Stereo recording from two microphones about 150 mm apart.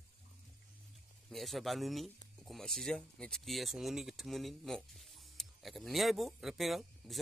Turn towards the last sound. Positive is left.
turn(degrees=0)  # may be behind; listen again after turning